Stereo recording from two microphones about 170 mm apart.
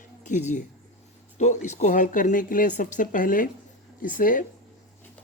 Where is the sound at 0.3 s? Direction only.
45° left (ahead or behind).